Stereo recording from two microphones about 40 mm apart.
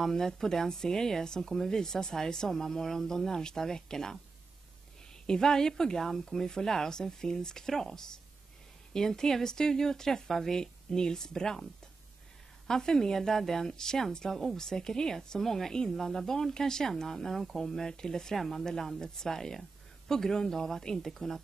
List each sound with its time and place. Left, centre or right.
0.0 s speech: centre
5.2 s speech: centre
12.6 s speech: centre